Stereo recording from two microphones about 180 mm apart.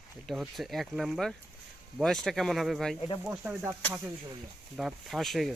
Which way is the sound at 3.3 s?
10° right (ahead or behind).